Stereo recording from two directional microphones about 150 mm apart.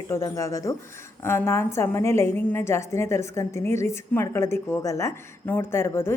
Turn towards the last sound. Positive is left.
turn(degrees=15)  # may be behind; listen again after turning